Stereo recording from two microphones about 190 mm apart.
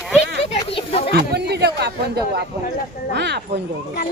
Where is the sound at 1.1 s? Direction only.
60° right (ahead or behind).